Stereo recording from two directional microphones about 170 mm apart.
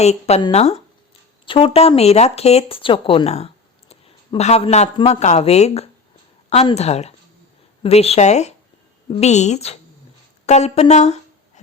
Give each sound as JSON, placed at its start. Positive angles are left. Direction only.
{"t": 0.0, "sound": "speech", "side_deg": 40}